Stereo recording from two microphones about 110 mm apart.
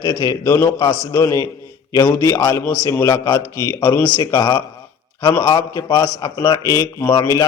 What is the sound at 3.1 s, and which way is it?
A man's voice, 40° left (ahead or behind).